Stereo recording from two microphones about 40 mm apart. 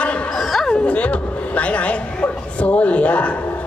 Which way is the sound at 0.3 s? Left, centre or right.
Centre.